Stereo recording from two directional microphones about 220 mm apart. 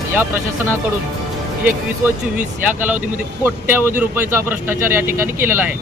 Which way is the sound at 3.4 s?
10° right (ahead or behind).